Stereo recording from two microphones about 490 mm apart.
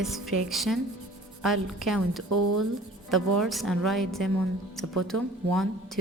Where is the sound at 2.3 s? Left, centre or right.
Right.